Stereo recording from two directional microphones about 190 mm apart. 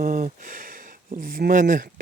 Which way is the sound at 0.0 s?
40° right (ahead or behind).